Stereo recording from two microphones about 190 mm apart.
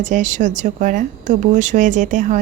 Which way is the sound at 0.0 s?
40° right (ahead or behind).